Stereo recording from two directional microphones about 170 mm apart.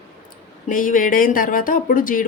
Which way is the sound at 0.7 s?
50° left (ahead or behind).